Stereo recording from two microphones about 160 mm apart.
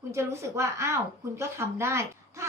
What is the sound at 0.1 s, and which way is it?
A woman's voice, 15° right (ahead or behind).